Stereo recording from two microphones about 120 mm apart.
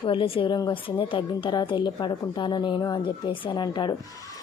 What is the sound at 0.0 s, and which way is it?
A woman's voice, 45° left (ahead or behind).